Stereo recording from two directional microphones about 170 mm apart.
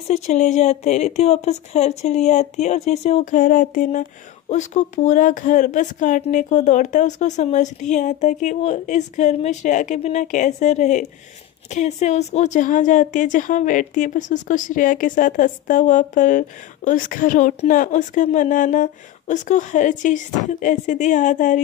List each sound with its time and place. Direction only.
0.1 s a woman's voice: 40° left (ahead or behind)